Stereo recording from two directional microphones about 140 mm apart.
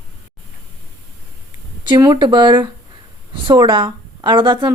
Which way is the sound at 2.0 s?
30° right (ahead or behind).